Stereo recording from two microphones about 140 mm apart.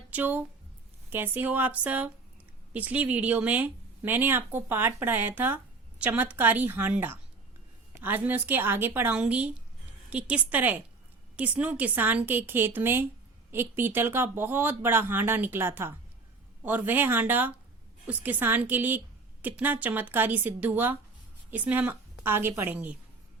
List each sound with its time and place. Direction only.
0.1 s a woman's voice: 15° right (ahead or behind)